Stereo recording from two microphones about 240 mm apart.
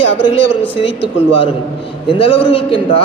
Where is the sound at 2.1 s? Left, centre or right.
Left.